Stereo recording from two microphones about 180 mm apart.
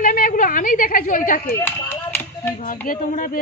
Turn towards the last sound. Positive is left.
turn(degrees=50)  # may be behind; listen again after turning